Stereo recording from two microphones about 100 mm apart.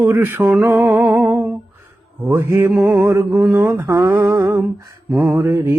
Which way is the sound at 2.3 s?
25° right (ahead or behind).